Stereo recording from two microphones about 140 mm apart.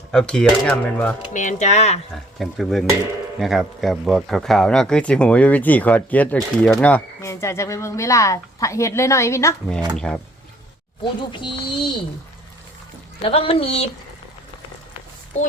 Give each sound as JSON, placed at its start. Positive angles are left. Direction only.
{"t": 0.1, "sound": "speech", "side_deg": 5}
{"t": 1.3, "sound": "speech", "side_deg": 65}
{"t": 2.1, "sound": "speech", "side_deg": 0}
{"t": 9.9, "sound": "speech", "side_deg": 5}
{"t": 11.2, "sound": "speech", "side_deg": 35}
{"t": 13.2, "sound": "speech", "side_deg": 40}
{"t": 15.3, "sound": "speech", "side_deg": 60}